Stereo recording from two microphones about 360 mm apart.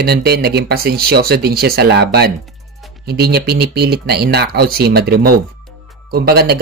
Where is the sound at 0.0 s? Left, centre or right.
Right.